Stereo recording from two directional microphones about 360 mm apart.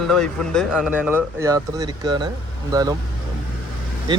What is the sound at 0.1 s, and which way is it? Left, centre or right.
A man's voice, centre.